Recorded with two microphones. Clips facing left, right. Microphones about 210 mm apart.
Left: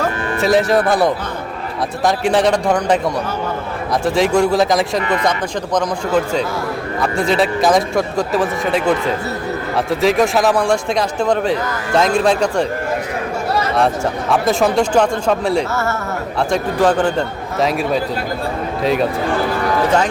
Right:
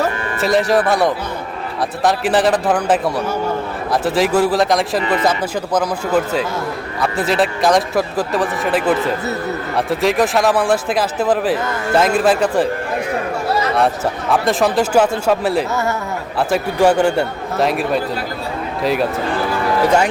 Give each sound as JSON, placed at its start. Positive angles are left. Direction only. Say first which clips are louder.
{"t": 0.0, "sound": "speech", "louder": "left 1 dB", "side_deg": 0}
{"t": 4.0, "sound": "speech", "louder": "left 1 dB", "side_deg": -5}
{"t": 13.7, "sound": "speech", "louder": "left 1 dB", "side_deg": 0}
{"t": 15.7, "sound": "a man's voice", "louder": "even", "side_deg": -15}